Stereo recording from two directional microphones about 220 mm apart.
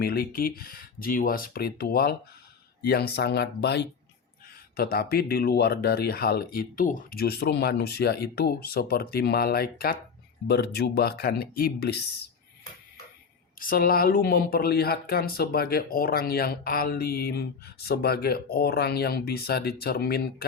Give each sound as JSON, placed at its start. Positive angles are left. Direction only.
{"t": 0.0, "sound": "speech", "side_deg": 45}
{"t": 13.6, "sound": "speech", "side_deg": 40}